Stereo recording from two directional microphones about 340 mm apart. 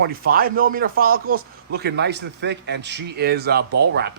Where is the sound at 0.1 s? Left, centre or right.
Right.